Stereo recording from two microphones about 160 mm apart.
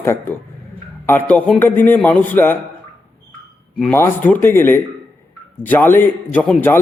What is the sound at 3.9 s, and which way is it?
Speech, 10° left (ahead or behind).